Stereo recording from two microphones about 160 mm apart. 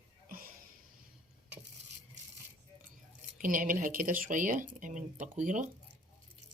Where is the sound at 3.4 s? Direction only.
60° right (ahead or behind).